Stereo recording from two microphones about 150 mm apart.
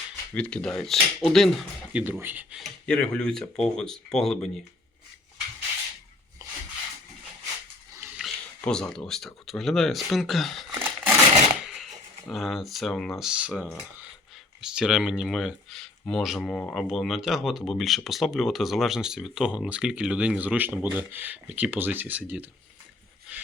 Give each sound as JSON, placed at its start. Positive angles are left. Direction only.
{"t": 0.3, "sound": "speech", "side_deg": 10}
{"t": 1.9, "sound": "speech", "side_deg": -10}
{"t": 2.6, "sound": "speech", "side_deg": 5}
{"t": 6.4, "sound": "rub", "side_deg": -20}
{"t": 7.9, "sound": "a sound", "side_deg": -15}
{"t": 8.2, "sound": "speech", "side_deg": 5}
{"t": 10.8, "sound": "a sound", "side_deg": -15}
{"t": 12.3, "sound": "speech", "side_deg": 0}
{"t": 23.3, "sound": "a sound", "side_deg": -10}